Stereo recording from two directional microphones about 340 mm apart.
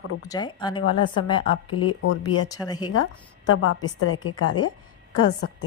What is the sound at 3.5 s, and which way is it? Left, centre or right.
Speech, left.